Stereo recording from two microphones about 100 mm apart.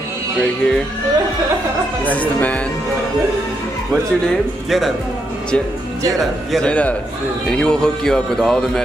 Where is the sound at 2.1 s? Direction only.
15° left (ahead or behind).